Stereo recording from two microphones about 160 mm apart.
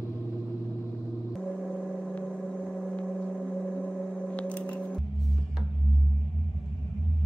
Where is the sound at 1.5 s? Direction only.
5° right (ahead or behind).